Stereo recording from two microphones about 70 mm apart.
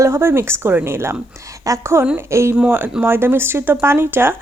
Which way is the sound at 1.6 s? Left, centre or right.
Right.